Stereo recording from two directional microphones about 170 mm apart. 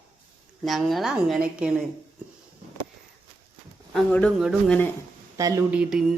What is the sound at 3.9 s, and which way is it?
Speech, 5° left (ahead or behind).